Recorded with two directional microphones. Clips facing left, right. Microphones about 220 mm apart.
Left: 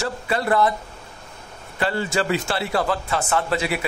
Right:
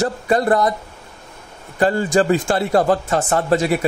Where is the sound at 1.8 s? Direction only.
45° right (ahead or behind).